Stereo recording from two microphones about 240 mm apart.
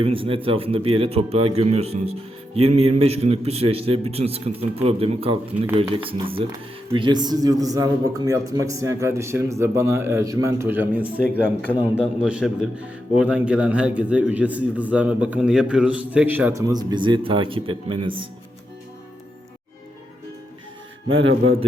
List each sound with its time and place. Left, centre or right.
0.0 s a man's voice: right
21.1 s mantra: right